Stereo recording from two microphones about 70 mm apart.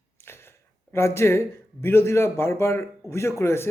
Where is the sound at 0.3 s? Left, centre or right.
Left.